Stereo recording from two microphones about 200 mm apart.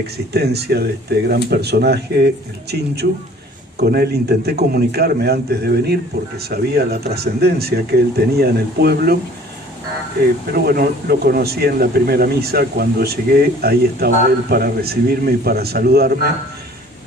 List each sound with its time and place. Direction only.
0.3 s a man's voice: 55° right (ahead or behind)
10.5 s a man's voice: 50° right (ahead or behind)